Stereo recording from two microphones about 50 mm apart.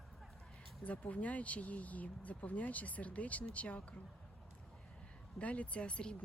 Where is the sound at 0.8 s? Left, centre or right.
Left.